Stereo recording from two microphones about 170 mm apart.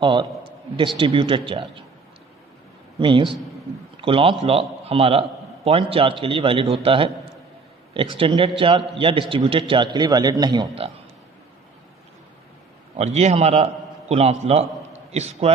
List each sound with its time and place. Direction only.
0.0 s a man's voice: 30° right (ahead or behind)
3.0 s a man's voice: 30° right (ahead or behind)
8.1 s a man's voice: 30° right (ahead or behind)
13.0 s a man's voice: 40° right (ahead or behind)